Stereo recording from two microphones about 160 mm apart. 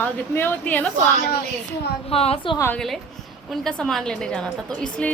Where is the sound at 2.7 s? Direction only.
Centre (ahead or behind).